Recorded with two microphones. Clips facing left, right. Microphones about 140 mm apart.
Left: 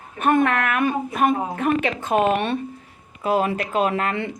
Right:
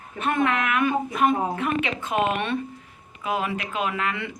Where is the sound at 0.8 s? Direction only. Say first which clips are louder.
Left 1 dB; 40° left (ahead or behind).